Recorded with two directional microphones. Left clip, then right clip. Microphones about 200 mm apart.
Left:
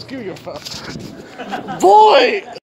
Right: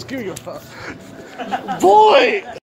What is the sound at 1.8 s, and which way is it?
Speech, 20° left (ahead or behind).